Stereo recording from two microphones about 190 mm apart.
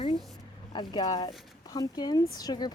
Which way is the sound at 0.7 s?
25° left (ahead or behind).